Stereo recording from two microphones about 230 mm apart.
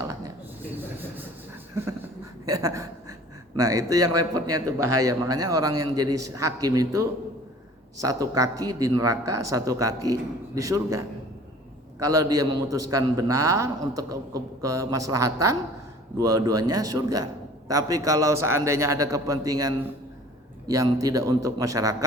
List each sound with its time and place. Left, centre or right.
0.0 s a sound: centre
2.5 s a man's voice: centre
4.5 s speech: right
5.0 s a man's voice: centre
12.0 s a man's voice: centre
13.3 s speech: right
13.6 s a man's voice: centre